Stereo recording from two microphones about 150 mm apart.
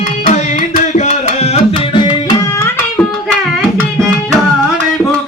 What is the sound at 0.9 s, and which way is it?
Tabla, 50° left (ahead or behind).